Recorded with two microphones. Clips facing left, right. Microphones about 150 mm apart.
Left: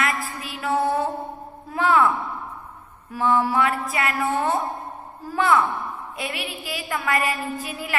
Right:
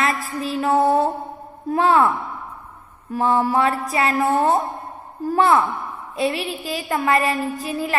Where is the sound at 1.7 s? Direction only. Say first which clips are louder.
Right 3 dB; 40° right (ahead or behind).